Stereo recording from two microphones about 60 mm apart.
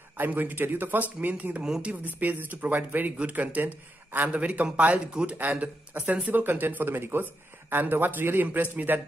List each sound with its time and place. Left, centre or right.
0.2 s a man's voice: right
1.6 s speech: centre
1.9 s a man's voice: right